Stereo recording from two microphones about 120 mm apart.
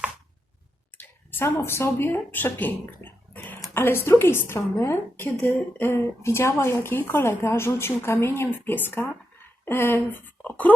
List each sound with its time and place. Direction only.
0.9 s a woman's voice: 20° left (ahead or behind)